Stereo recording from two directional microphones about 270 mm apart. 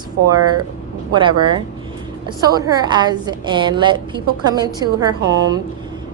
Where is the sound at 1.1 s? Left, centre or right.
Centre.